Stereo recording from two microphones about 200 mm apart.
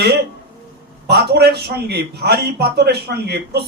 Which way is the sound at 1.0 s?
50° right (ahead or behind).